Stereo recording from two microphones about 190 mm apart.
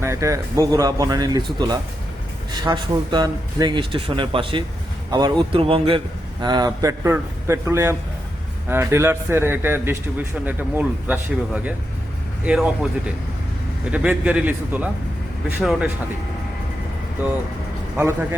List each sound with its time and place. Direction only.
0.0 s speech: 15° right (ahead or behind)
13.9 s speech: 5° right (ahead or behind)
17.9 s speech: 10° right (ahead or behind)